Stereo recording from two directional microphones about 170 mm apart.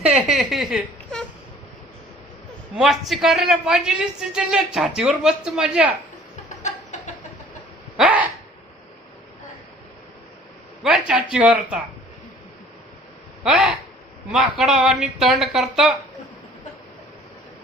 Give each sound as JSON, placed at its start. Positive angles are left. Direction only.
{"t": 0.0, "sound": "speech", "side_deg": -5}
{"t": 2.7, "sound": "a woman's voice", "side_deg": 0}
{"t": 6.6, "sound": "a sound", "side_deg": 45}
{"t": 7.9, "sound": "a sound", "side_deg": -5}
{"t": 10.8, "sound": "speech", "side_deg": -5}
{"t": 13.4, "sound": "a woman's voice", "side_deg": -5}